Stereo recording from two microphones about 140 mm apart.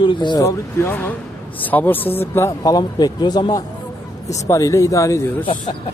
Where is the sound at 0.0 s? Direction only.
35° left (ahead or behind).